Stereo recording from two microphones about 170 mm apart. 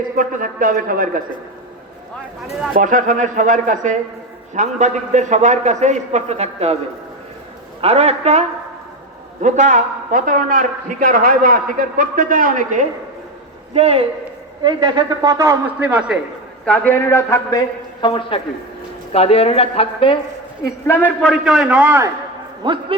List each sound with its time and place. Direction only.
0.2 s a man's voice: 55° right (ahead or behind)
2.7 s a man's voice: 50° right (ahead or behind)
7.8 s a man's voice: 35° right (ahead or behind); by 12.8 s 55° right (ahead or behind)
13.7 s a man's voice: 35° right (ahead or behind)
14.6 s a man's voice: 25° right (ahead or behind); by 16.1 s 5° right (ahead or behind)
16.6 s speech: 10° left (ahead or behind)
18.0 s a woman's voice: 30° left (ahead or behind)
20.8 s a man's voice: 10° left (ahead or behind); by 22.1 s 15° right (ahead or behind)
22.6 s a man's voice: 30° right (ahead or behind)